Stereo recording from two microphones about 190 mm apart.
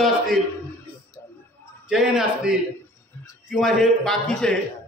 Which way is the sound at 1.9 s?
5° right (ahead or behind).